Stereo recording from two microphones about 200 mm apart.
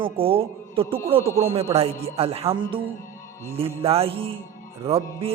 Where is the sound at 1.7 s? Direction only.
30° right (ahead or behind).